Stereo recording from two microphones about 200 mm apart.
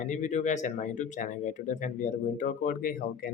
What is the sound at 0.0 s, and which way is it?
Speech, 35° left (ahead or behind).